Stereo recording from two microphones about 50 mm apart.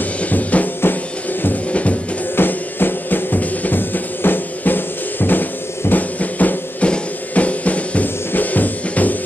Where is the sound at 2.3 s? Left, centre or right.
Left.